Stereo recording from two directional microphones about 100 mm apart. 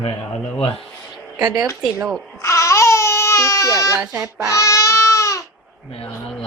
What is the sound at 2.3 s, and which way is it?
Baby cry, 30° left (ahead or behind).